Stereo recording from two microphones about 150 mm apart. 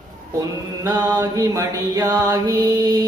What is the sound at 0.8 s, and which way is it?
Mantra, 25° right (ahead or behind).